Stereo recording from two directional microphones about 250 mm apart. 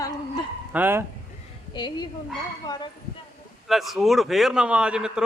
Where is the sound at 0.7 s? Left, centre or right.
Centre.